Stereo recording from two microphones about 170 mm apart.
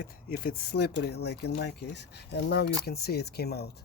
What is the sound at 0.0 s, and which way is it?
Speech, 65° left (ahead or behind).